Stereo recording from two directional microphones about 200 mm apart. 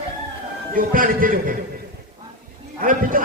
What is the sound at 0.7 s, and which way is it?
Speech, 45° right (ahead or behind).